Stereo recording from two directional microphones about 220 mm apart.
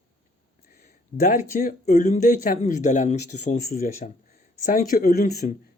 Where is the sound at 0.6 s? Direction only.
40° left (ahead or behind).